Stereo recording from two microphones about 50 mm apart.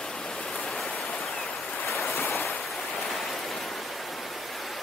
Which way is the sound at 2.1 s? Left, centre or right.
Left.